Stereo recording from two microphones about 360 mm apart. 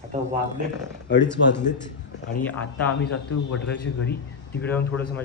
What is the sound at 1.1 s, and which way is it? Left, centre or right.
Speech, left.